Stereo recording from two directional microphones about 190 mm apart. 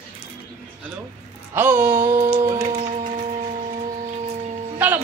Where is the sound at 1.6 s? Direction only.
10° right (ahead or behind).